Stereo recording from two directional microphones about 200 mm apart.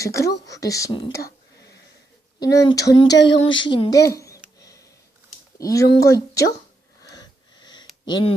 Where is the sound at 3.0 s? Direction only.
60° left (ahead or behind).